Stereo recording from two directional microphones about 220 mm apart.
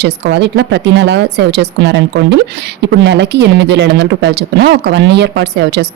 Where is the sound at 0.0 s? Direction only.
50° right (ahead or behind).